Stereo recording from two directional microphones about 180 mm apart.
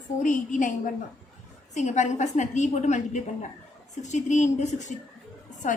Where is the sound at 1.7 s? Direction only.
40° left (ahead or behind).